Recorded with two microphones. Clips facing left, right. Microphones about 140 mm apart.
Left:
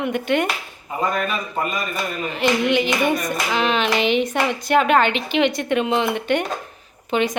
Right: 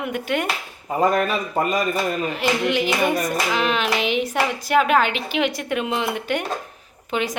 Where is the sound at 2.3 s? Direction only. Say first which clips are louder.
Left 2 dB; centre (ahead or behind).